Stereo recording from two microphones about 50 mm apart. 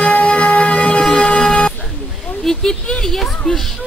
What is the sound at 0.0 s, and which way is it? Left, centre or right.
Music, left.